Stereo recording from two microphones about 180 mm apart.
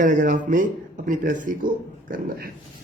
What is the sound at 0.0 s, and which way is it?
Speech, 45° right (ahead or behind).